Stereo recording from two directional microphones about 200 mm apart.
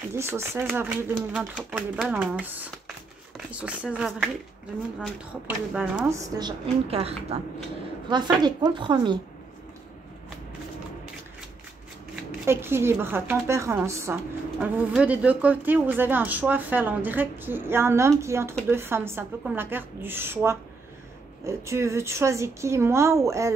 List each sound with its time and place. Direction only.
0.1 s speech: 10° right (ahead or behind)
5.8 s a woman's voice: 10° right (ahead or behind)
12.3 s speech: 10° right (ahead or behind)